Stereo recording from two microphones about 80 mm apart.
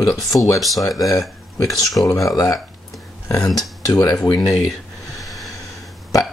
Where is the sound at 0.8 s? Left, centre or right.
Left.